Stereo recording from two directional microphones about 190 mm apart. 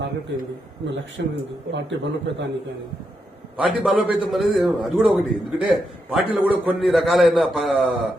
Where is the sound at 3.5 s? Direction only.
5° right (ahead or behind).